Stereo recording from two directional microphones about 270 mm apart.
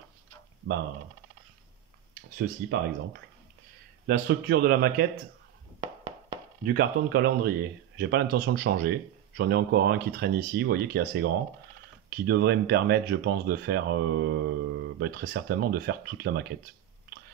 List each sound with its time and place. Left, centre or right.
2.3 s speech: right
4.3 s speech: right
5.8 s a sound: centre
6.6 s speech: right